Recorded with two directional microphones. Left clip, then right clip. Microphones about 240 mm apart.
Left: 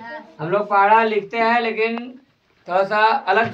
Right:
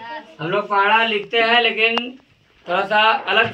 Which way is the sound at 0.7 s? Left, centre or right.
Centre.